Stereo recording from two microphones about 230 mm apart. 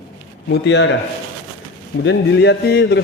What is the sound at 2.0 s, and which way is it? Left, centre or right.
Speech, left.